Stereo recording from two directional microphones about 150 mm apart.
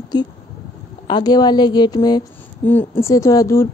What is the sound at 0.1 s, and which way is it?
A woman's voice, 30° left (ahead or behind).